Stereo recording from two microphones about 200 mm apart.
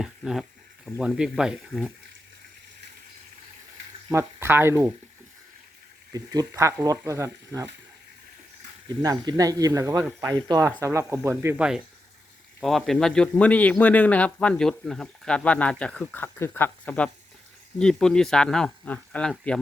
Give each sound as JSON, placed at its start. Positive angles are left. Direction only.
{"t": 0.0, "sound": "a man's voice", "side_deg": 0}
{"t": 4.1, "sound": "speech", "side_deg": -15}
{"t": 6.1, "sound": "speech", "side_deg": -15}
{"t": 9.0, "sound": "a man's voice", "side_deg": -20}